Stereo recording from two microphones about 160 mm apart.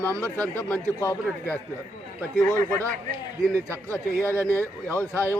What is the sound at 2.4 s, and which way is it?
Speech, 15° left (ahead or behind).